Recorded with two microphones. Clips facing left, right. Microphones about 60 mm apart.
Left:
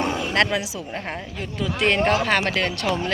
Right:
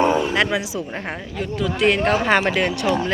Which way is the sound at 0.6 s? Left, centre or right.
Right.